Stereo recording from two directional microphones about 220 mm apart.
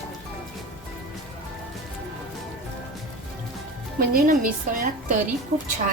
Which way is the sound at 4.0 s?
40° right (ahead or behind).